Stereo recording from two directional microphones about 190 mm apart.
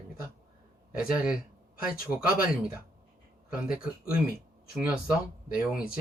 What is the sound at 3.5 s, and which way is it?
Speech, 5° right (ahead or behind).